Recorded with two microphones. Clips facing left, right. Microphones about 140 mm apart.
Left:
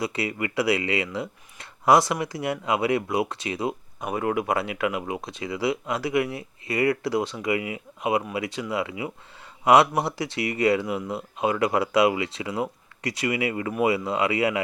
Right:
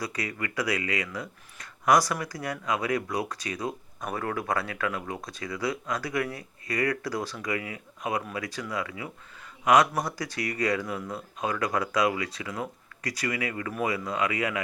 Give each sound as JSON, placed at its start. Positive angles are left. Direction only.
{"t": 0.0, "sound": "speech", "side_deg": 25}